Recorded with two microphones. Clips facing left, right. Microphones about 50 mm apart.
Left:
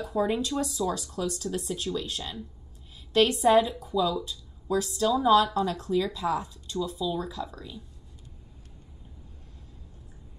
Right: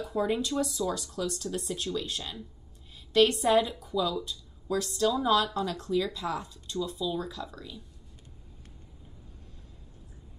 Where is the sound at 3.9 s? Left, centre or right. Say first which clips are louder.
Left 3 dB; left.